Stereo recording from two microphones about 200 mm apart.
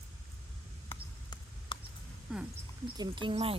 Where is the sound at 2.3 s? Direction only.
5° right (ahead or behind).